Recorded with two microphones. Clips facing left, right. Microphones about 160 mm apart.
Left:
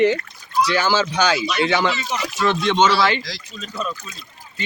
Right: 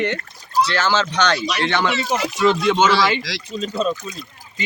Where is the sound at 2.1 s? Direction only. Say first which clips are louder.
Right 4 dB; 45° right (ahead or behind).